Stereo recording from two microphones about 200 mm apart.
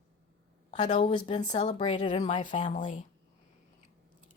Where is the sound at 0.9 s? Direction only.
25° left (ahead or behind).